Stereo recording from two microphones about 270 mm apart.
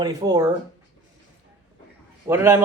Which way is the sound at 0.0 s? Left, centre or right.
Centre.